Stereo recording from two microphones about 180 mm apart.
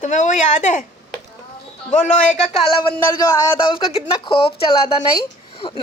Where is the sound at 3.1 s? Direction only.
15° left (ahead or behind).